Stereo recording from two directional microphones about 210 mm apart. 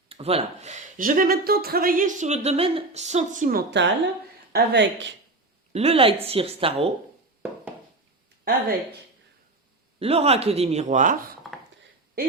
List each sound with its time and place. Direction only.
0.1 s speech: 30° right (ahead or behind)
4.5 s speech: 55° right (ahead or behind)
5.7 s speech: 30° right (ahead or behind)
8.4 s speech: 45° right (ahead or behind)
10.0 s speech: 30° right (ahead or behind)